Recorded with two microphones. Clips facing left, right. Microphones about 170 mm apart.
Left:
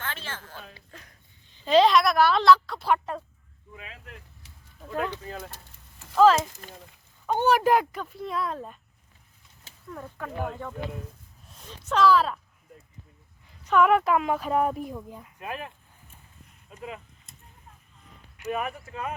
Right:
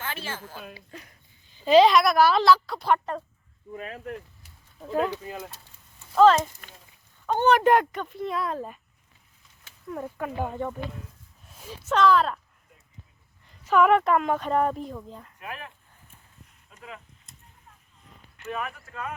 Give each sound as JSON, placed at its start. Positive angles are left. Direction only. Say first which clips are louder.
{"t": 0.0, "sound": "a sound", "louder": "right 2 dB", "side_deg": -10}
{"t": 0.7, "sound": "speech", "louder": "right 5 dB", "side_deg": -5}
{"t": 3.7, "sound": "speech", "louder": "right 10 dB", "side_deg": -45}
{"t": 5.0, "sound": "speech", "louder": "right 3 dB", "side_deg": -10}
{"t": 6.1, "sound": "speech", "louder": "right 1 dB", "side_deg": 5}
{"t": 6.6, "sound": "speech", "louder": "left 6 dB", "side_deg": 35}
{"t": 7.3, "sound": "speech", "louder": "right 2 dB", "side_deg": 5}
{"t": 9.9, "sound": "speech", "louder": "right 4 dB", "side_deg": -15}
{"t": 13.7, "sound": "speech", "louder": "right 1 dB", "side_deg": 0}
{"t": 15.4, "sound": "speech", "louder": "left 5 dB", "side_deg": 25}
{"t": 18.3, "sound": "speech", "louder": "left 3 dB", "side_deg": 15}